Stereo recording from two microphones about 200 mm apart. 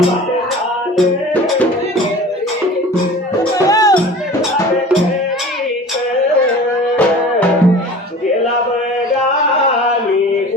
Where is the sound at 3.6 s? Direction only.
15° left (ahead or behind).